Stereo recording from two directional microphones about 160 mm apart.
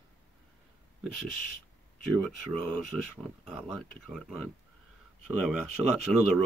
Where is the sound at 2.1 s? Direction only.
Centre (ahead or behind).